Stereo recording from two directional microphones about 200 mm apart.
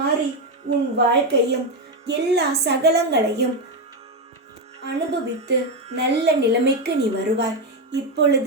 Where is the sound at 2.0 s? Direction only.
55° right (ahead or behind).